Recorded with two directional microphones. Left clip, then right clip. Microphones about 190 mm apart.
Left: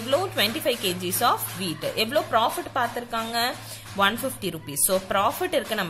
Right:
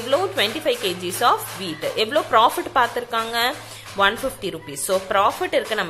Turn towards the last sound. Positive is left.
turn(degrees=15)  # may be behind; listen again after turning